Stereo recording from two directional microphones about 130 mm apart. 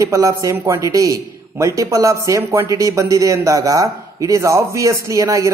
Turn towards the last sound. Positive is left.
turn(degrees=-25)  # may be behind; listen again after turning